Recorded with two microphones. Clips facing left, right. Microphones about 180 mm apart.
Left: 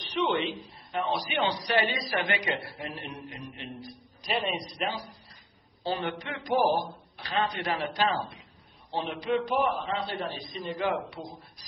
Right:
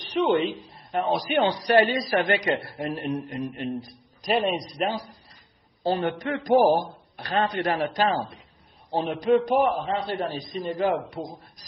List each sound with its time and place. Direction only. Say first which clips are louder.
0.1 s a woman's voice: right 6 dB; 45° right (ahead or behind)